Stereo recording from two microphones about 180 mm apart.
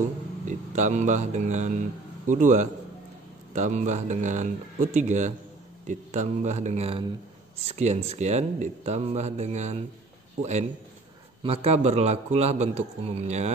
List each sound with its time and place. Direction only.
0.5 s a man's voice: 40° right (ahead or behind)
11.4 s speech: 35° right (ahead or behind)